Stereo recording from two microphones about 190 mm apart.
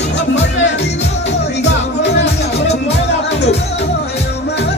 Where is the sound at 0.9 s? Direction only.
35° left (ahead or behind).